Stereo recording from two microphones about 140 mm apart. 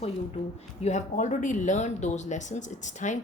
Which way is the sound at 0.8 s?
60° left (ahead or behind).